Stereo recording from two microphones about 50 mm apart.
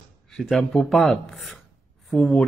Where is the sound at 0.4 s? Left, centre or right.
Centre.